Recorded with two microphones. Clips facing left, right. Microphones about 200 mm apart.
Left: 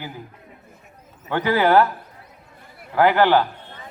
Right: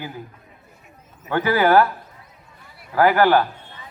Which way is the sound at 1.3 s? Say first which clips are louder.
Right 1 dB; 15° left (ahead or behind).